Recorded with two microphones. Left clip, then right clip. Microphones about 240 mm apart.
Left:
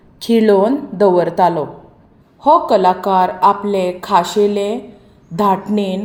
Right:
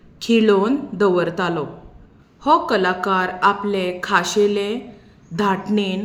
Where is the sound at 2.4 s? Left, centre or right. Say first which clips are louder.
Left 6 dB; centre.